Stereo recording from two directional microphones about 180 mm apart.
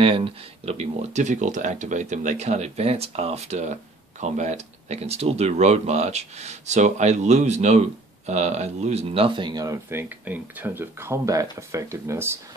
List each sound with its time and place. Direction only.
0.0 s speech: 30° right (ahead or behind); by 12.4 s 15° right (ahead or behind)